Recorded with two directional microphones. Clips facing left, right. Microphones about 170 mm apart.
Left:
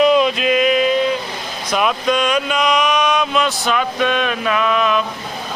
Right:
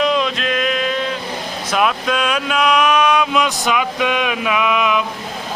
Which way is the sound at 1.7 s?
Centre (ahead or behind).